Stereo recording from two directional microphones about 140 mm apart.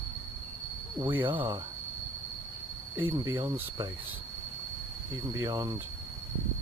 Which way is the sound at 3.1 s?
25° right (ahead or behind).